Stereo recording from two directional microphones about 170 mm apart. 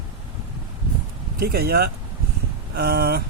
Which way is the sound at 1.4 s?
65° right (ahead or behind).